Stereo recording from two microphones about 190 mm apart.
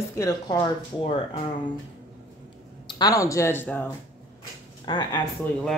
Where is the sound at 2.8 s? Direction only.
20° left (ahead or behind).